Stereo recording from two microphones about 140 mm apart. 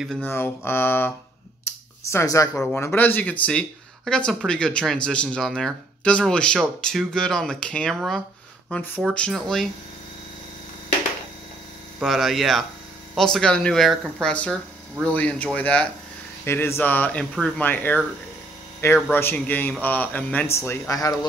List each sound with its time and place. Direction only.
0.2 s a man's voice: 15° left (ahead or behind)
1.6 s a sound: 20° left (ahead or behind)
2.5 s a man's voice: 10° left (ahead or behind)
12.0 s a man's voice: centre (ahead or behind)
19.0 s a man's voice: 15° left (ahead or behind)